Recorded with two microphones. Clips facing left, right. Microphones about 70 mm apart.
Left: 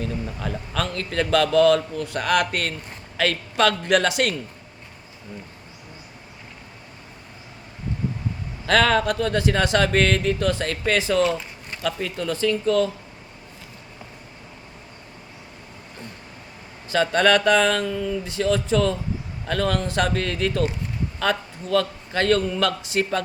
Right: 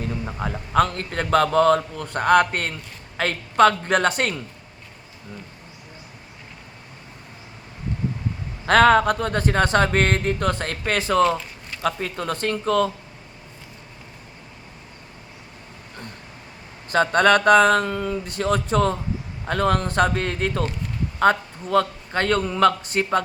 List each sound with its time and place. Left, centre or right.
0.1 s a man's voice: right
8.6 s speech: right
16.9 s a man's voice: right